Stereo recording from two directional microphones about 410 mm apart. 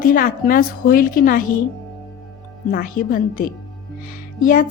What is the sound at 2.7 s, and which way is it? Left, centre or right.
A woman's voice, left.